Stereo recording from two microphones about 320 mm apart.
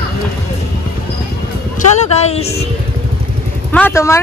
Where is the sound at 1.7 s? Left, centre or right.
Left.